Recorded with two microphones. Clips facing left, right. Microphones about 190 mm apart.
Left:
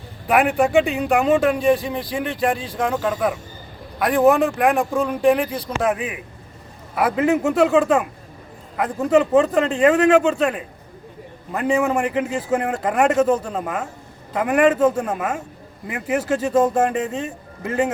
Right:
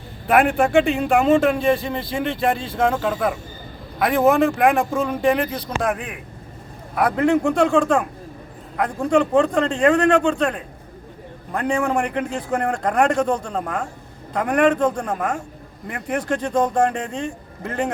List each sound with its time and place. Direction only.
0.3 s a man's voice: centre (ahead or behind)
1.7 s speech: 10° left (ahead or behind)
2.1 s a man's voice: centre (ahead or behind)